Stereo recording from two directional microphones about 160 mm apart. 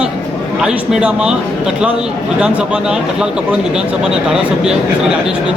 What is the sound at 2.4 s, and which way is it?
Speech, 5° right (ahead or behind).